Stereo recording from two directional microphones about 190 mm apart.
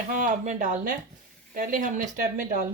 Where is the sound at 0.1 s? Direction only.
45° right (ahead or behind).